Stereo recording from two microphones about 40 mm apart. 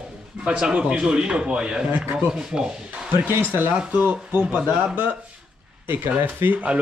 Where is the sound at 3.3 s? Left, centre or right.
Right.